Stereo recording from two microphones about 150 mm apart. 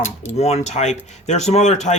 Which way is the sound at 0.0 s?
45° left (ahead or behind).